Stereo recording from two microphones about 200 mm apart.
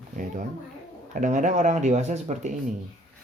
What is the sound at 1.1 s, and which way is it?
Speech, 40° right (ahead or behind).